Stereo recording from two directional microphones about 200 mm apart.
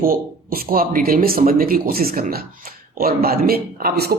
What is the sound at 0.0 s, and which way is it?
Speech, 45° right (ahead or behind).